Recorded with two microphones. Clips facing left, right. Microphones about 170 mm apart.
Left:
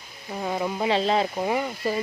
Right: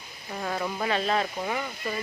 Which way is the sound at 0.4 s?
15° left (ahead or behind).